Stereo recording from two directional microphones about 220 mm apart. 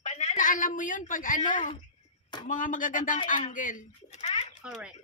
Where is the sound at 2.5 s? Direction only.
35° left (ahead or behind).